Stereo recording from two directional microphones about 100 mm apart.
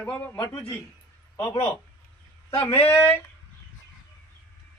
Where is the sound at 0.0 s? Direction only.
15° left (ahead or behind).